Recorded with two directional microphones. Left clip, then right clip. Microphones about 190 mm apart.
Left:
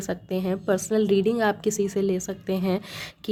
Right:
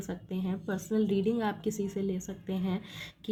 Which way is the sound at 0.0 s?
35° left (ahead or behind).